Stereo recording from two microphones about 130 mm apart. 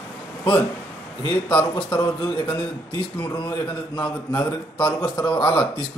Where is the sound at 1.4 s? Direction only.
35° left (ahead or behind).